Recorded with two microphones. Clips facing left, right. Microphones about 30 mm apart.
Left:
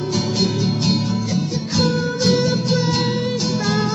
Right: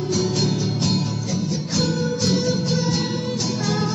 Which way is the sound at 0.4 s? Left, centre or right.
Left.